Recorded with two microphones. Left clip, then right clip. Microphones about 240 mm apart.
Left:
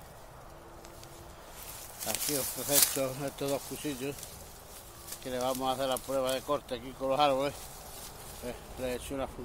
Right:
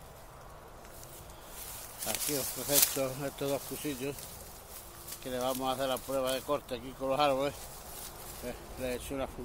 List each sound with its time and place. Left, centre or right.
2.0 s speech: centre
5.2 s speech: centre